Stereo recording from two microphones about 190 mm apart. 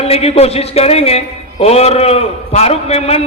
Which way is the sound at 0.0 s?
30° left (ahead or behind).